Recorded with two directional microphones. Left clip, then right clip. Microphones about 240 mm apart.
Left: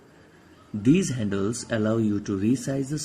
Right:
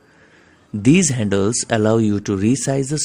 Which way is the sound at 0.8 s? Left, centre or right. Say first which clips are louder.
Right 7 dB; right.